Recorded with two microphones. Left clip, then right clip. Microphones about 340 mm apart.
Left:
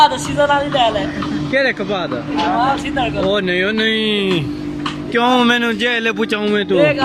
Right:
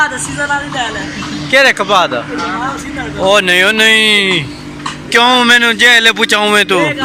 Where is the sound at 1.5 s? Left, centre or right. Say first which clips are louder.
Right 8 dB; right.